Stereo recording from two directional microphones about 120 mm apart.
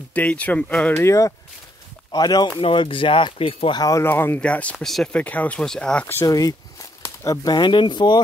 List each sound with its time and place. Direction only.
0.1 s speech: 10° left (ahead or behind)
0.9 s speech: 25° left (ahead or behind)
2.6 s speech: 45° left (ahead or behind)
3.7 s speech: 30° left (ahead or behind)
4.0 s speech: 20° left (ahead or behind)
6.2 s speech: 30° left (ahead or behind)